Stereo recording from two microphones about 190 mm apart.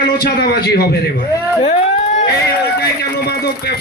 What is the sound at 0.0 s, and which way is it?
A man's voice, 55° left (ahead or behind).